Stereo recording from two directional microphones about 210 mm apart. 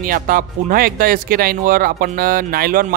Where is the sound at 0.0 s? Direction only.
40° right (ahead or behind).